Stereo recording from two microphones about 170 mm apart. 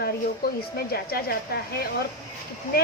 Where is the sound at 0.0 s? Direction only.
65° left (ahead or behind).